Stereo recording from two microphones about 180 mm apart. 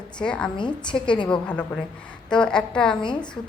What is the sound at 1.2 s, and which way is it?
A woman's voice, 5° left (ahead or behind).